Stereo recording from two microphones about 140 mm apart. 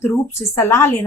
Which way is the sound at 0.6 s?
15° left (ahead or behind).